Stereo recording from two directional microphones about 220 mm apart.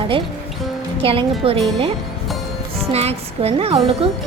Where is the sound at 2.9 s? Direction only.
30° right (ahead or behind).